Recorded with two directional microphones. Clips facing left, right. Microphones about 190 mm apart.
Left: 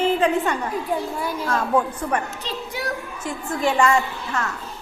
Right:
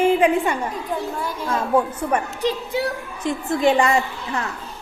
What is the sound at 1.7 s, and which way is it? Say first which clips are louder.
Speech: right 4 dB; 10° right (ahead or behind).